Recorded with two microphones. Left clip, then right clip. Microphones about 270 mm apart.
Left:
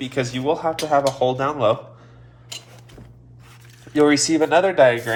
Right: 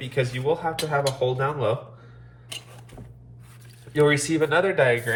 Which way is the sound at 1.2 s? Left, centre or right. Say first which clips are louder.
Left 5 dB; left.